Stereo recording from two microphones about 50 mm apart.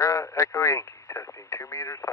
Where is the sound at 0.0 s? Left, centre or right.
Left.